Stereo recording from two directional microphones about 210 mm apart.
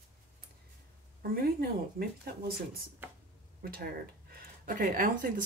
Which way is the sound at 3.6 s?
45° right (ahead or behind).